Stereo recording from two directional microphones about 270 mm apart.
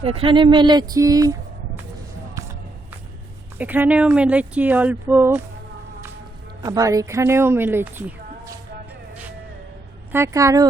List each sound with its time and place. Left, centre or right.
0.0 s speech: right
3.6 s speech: centre
6.6 s speech: centre
10.1 s a woman's voice: centre